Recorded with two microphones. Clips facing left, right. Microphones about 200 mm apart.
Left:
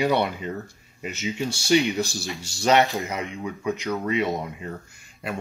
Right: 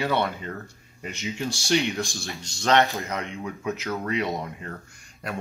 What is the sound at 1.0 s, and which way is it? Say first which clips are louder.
Speech: left 2 dB; centre (ahead or behind).